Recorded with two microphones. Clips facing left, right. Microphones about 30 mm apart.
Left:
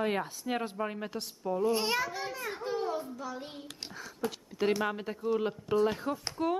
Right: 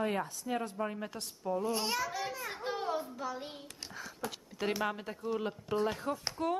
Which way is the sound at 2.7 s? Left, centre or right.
Centre.